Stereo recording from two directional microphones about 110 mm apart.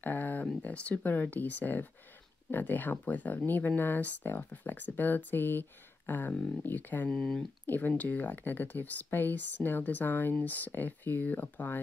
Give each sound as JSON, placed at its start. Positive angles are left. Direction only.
{"t": 0.0, "sound": "speech", "side_deg": 15}
{"t": 7.1, "sound": "speech", "side_deg": 5}
{"t": 7.6, "sound": "speech", "side_deg": 15}